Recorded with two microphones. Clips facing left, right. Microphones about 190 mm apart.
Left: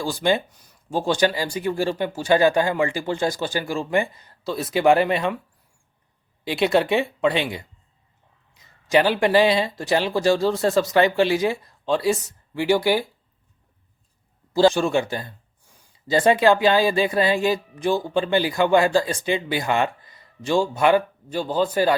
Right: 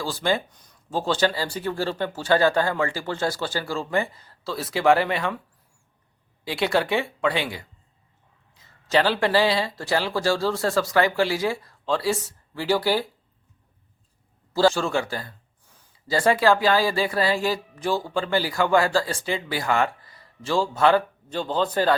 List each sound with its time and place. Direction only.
0.0 s speech: 15° left (ahead or behind)
6.4 s speech: 20° left (ahead or behind)
14.5 s speech: 15° left (ahead or behind)